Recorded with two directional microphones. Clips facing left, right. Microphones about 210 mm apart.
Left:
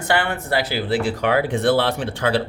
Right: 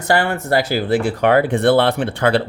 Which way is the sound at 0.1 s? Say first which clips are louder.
Right 4 dB; 40° right (ahead or behind).